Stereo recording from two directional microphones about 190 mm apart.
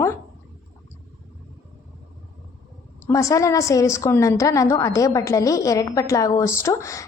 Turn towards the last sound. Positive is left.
turn(degrees=15)  # may be behind; listen again after turning